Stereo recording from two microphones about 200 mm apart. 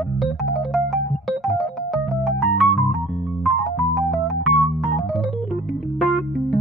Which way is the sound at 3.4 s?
Centre (ahead or behind).